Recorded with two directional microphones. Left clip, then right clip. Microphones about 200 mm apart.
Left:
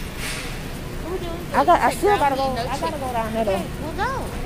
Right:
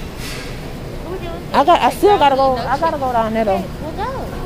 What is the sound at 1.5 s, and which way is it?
Speech, 30° right (ahead or behind).